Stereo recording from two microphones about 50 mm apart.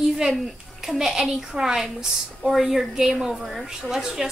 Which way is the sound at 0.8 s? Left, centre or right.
Centre.